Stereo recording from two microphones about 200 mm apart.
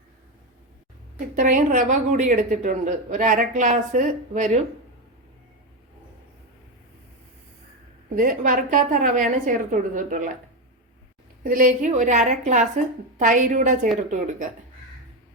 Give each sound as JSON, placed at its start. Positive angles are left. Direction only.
{"t": 1.4, "sound": "a woman's voice", "side_deg": -40}
{"t": 8.1, "sound": "a woman's voice", "side_deg": -40}
{"t": 11.4, "sound": "a woman's voice", "side_deg": -40}